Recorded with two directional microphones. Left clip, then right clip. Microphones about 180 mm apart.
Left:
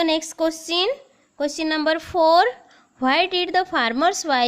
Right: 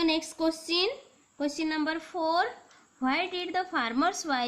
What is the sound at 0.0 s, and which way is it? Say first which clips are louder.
A woman's voice: left 7 dB; 60° left (ahead or behind).